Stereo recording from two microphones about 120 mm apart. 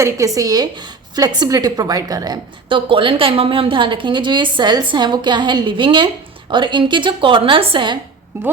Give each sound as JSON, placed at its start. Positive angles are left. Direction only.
{"t": 0.3, "sound": "a woman's voice", "side_deg": -30}
{"t": 2.6, "sound": "a woman's voice", "side_deg": -45}